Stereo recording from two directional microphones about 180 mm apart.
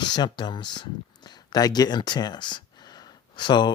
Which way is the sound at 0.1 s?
25° left (ahead or behind).